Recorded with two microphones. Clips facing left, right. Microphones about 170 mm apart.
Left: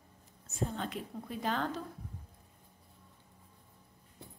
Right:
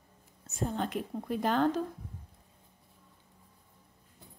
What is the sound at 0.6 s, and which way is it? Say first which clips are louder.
A woman's voice: right 4 dB; 50° right (ahead or behind).